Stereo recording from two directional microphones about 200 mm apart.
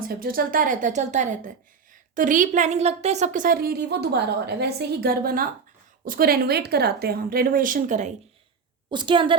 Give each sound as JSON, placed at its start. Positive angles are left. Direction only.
{"t": 0.1, "sound": "a woman's voice", "side_deg": -45}
{"t": 8.9, "sound": "a woman's voice", "side_deg": -25}